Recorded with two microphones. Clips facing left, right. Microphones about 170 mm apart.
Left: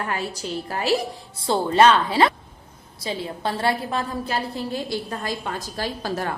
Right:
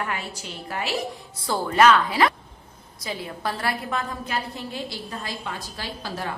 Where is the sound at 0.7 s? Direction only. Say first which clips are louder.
Left 4 dB; 35° left (ahead or behind).